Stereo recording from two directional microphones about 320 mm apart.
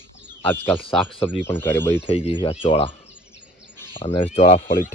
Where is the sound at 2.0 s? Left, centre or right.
Centre.